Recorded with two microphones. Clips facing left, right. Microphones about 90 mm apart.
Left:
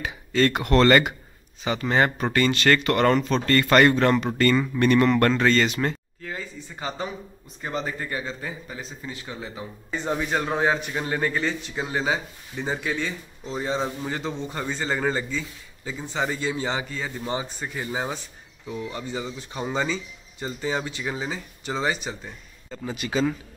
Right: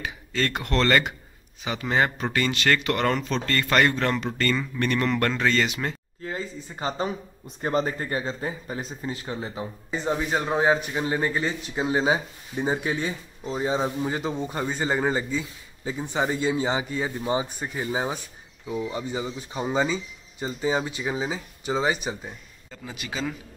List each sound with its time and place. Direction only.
0.0 s speech: 5° left (ahead or behind)
6.2 s speech: 30° right (ahead or behind)
9.8 s speech: 5° right (ahead or behind)